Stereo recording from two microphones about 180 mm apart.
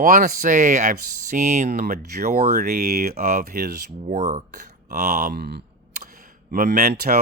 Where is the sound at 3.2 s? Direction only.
45° right (ahead or behind).